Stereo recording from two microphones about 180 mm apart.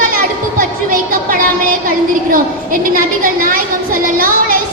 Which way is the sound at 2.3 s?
50° right (ahead or behind).